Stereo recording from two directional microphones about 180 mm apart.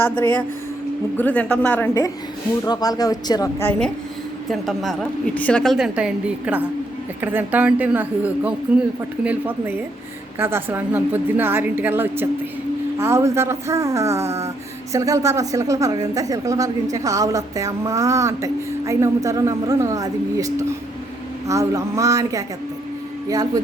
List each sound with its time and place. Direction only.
0.0 s a woman's voice: 10° left (ahead or behind)
1.9 s a woman's voice: 20° left (ahead or behind); by 22.4 s 20° right (ahead or behind)